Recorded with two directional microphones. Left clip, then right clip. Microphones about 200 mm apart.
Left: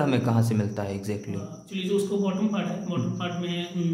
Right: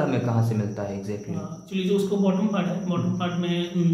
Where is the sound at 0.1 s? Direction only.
40° left (ahead or behind).